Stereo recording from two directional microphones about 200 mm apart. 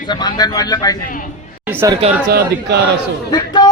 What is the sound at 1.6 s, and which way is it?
Chatter, 10° right (ahead or behind).